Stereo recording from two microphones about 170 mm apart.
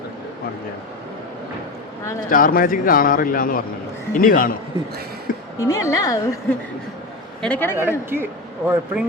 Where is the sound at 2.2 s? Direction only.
55° left (ahead or behind).